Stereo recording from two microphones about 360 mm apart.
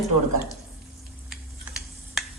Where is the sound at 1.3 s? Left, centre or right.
Centre.